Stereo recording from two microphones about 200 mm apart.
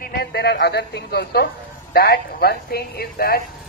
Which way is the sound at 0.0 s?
50° left (ahead or behind).